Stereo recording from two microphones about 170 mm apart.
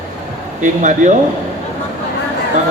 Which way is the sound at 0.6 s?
45° right (ahead or behind).